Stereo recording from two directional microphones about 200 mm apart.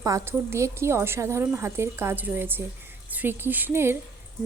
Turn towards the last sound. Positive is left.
turn(degrees=-10)  # may be behind; listen again after turning